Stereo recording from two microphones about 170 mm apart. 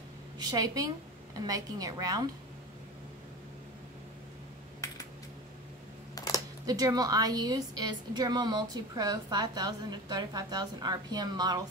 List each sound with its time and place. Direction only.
0.4 s a woman's voice: 20° right (ahead or behind)
6.1 s a sound: 20° left (ahead or behind)
6.6 s a woman's voice: 20° right (ahead or behind)